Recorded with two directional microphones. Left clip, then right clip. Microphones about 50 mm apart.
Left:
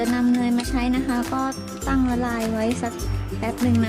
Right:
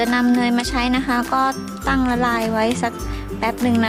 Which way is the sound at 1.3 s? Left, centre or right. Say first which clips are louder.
Right 7 dB; centre.